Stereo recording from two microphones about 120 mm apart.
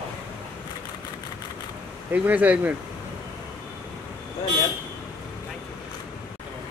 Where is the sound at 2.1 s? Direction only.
15° right (ahead or behind).